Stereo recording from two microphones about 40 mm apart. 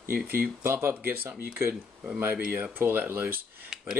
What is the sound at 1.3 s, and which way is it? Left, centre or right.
Speech, right.